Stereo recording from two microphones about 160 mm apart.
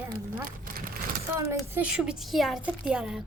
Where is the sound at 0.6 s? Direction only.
60° right (ahead or behind).